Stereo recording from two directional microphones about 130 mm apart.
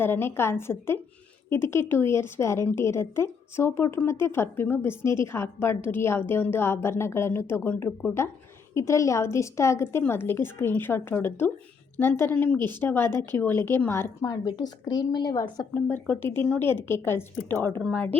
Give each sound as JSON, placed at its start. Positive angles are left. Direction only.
{"t": 0.0, "sound": "a woman's voice", "side_deg": 15}
{"t": 14.3, "sound": "a woman's voice", "side_deg": 30}